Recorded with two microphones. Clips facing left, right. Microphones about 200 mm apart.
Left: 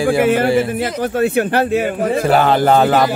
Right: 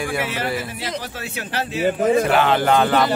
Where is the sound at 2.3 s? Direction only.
40° left (ahead or behind).